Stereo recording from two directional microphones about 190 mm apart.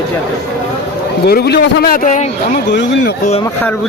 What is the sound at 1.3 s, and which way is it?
A man's voice, 60° left (ahead or behind).